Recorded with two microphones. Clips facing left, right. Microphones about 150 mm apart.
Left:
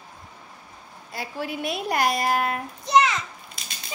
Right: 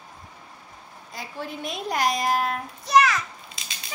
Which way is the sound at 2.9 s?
25° left (ahead or behind).